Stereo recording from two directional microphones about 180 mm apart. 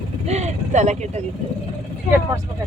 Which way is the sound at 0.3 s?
40° right (ahead or behind).